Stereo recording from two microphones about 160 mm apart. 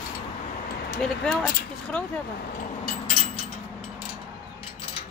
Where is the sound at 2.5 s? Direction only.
55° left (ahead or behind).